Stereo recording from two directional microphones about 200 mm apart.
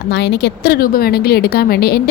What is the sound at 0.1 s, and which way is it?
Speech, 60° left (ahead or behind).